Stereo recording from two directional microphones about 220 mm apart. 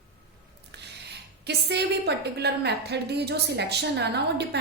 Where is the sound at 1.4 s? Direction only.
50° right (ahead or behind).